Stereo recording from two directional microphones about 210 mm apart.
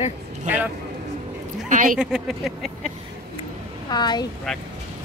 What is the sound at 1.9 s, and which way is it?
Speech, 5° right (ahead or behind).